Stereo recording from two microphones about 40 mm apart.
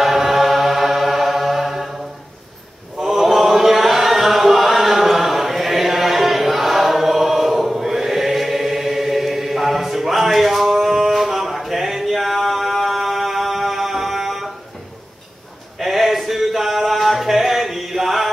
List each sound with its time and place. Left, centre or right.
0.0 s chant: centre
3.0 s chant: centre
15.8 s a sound: centre